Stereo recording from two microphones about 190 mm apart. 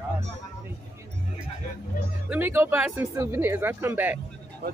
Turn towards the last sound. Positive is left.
turn(degrees=-10)  # may be behind; listen again after turning